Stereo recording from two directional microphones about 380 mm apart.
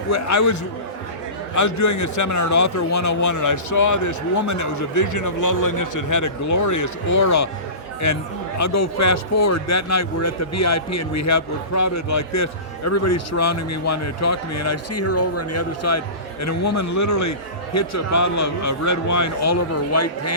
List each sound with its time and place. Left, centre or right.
0.1 s a man's voice: left
1.5 s a man's voice: left